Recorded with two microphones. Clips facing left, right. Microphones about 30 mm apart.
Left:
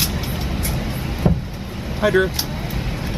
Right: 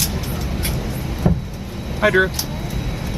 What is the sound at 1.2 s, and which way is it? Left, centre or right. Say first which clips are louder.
Vehicle: even; centre.